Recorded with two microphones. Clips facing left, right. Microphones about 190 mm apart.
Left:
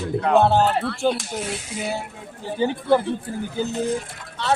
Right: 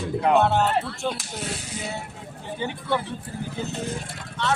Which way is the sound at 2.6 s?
35° left (ahead or behind).